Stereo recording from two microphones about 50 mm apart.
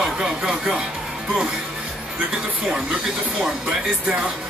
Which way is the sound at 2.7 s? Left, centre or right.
Centre.